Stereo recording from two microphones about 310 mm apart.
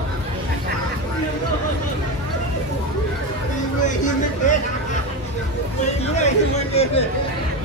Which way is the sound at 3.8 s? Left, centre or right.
Left.